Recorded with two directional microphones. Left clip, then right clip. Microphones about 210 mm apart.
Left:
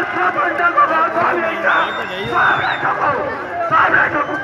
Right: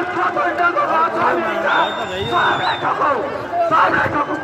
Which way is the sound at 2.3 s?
55° right (ahead or behind).